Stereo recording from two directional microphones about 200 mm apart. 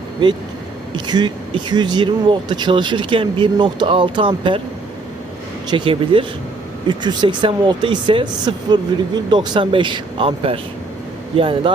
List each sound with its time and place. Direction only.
0.9 s speech: 20° right (ahead or behind)
5.7 s speech: 25° right (ahead or behind)